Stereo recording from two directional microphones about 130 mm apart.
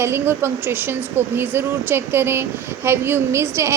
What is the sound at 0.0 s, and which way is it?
A woman's voice, 20° right (ahead or behind).